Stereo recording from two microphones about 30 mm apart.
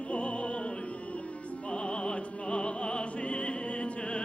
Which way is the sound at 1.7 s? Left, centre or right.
Left.